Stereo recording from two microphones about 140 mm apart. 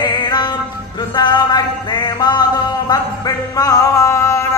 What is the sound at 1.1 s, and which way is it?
Music, 30° left (ahead or behind).